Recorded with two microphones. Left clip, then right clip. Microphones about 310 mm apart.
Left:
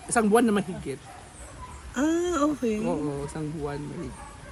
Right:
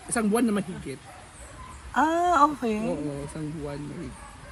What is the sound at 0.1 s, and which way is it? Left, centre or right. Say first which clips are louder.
Speech: left 4 dB; centre.